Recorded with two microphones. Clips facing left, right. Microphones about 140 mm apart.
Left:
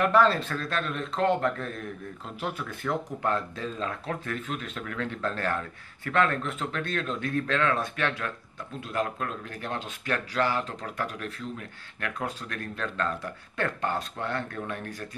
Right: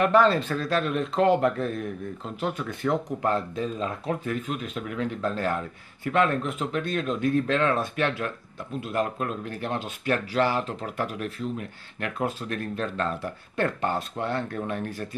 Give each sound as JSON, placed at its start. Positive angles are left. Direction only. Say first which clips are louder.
{"t": 0.0, "sound": "a man's voice", "louder": "right 2 dB", "side_deg": 0}
{"t": 3.3, "sound": "speech", "louder": "right 3 dB", "side_deg": -30}
{"t": 3.6, "sound": "speech", "louder": "right 3 dB", "side_deg": -15}